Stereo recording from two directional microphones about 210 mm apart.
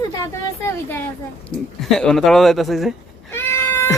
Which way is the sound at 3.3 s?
10° left (ahead or behind).